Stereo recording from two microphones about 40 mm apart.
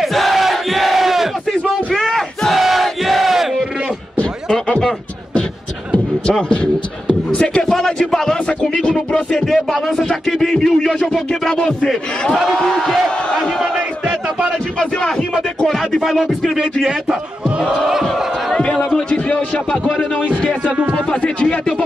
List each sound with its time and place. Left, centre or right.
0.0 s crowd: centre
2.0 s battle cry: centre
6.2 s beatboxing: left
7.3 s music: left
7.6 s a sound: centre
8.6 s music: centre
9.5 s a sound: centre
10.6 s speech: centre
13.4 s battle cry: centre
15.6 s speech: centre
18.6 s a man's voice: left
21.1 s a man's voice: left